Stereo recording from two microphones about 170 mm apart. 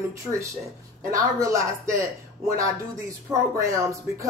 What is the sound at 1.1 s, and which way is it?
Speech, 20° right (ahead or behind).